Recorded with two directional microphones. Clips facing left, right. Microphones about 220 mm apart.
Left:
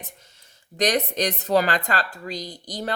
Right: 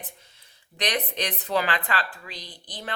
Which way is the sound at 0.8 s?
40° left (ahead or behind).